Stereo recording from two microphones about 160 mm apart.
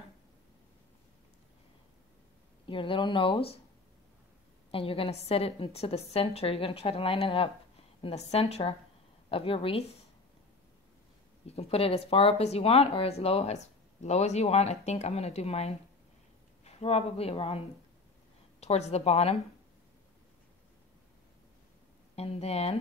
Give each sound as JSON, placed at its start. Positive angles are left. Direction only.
{"t": 2.6, "sound": "a woman's voice", "side_deg": 30}
{"t": 4.6, "sound": "a woman's voice", "side_deg": 35}
{"t": 11.4, "sound": "a woman's voice", "side_deg": 40}
{"t": 22.1, "sound": "a woman's voice", "side_deg": 40}